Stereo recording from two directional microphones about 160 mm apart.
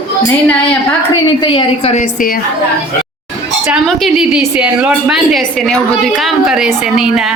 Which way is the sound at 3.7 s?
Centre (ahead or behind).